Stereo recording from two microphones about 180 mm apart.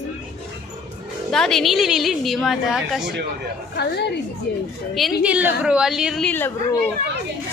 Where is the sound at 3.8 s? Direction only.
65° left (ahead or behind).